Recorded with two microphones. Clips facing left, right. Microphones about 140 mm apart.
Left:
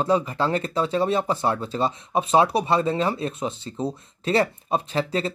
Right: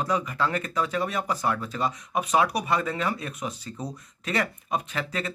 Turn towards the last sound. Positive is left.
turn(degrees=30)  # may be behind; listen again after turning